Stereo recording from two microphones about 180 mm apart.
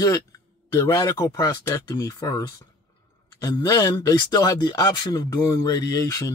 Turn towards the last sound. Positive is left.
turn(degrees=15)  # may be behind; listen again after turning